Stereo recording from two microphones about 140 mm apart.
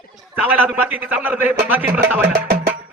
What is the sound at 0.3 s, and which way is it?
A man's voice, 10° right (ahead or behind).